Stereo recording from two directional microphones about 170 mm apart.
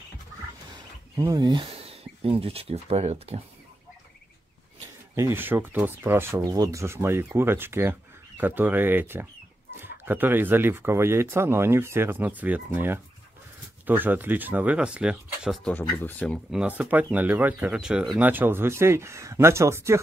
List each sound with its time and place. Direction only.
1.1 s speech: 20° right (ahead or behind); by 3.3 s 40° right (ahead or behind)
5.1 s speech: 15° right (ahead or behind)
15.7 s speech: 10° left (ahead or behind)
16.5 s speech: 10° right (ahead or behind)